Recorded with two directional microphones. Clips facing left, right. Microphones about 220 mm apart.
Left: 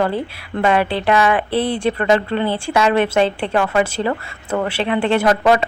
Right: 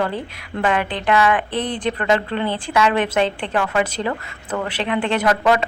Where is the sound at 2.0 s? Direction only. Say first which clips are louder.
Left 2 dB; 35° left (ahead or behind).